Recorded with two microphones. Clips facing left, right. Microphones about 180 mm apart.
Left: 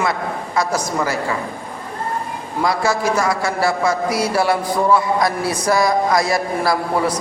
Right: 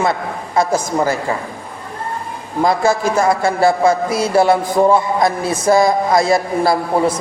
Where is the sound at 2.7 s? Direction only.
50° right (ahead or behind).